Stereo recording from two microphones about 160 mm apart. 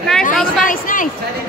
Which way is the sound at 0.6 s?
60° left (ahead or behind).